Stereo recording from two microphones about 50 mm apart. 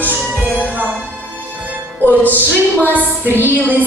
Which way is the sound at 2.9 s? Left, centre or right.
Right.